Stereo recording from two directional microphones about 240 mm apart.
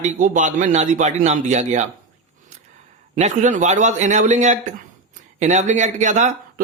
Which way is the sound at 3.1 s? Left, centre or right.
Right.